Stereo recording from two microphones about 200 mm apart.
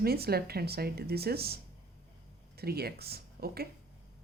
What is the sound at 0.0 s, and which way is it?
Speech, 50° right (ahead or behind).